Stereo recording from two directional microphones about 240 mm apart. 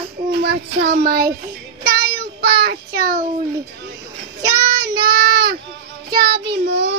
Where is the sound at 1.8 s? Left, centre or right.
Right.